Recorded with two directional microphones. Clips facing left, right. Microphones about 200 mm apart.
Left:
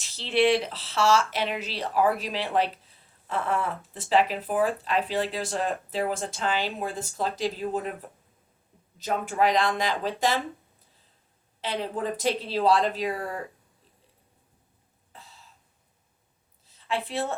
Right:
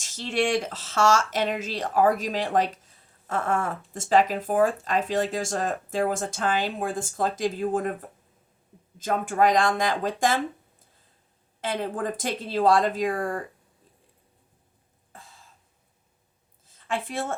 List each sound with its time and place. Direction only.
0.0 s speech: 45° right (ahead or behind)
9.0 s speech: 50° right (ahead or behind)
15.1 s throat clearing: 50° right (ahead or behind)
16.6 s a sound: 50° right (ahead or behind)